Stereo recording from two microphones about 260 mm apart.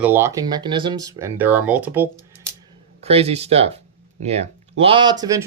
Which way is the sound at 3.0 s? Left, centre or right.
Right.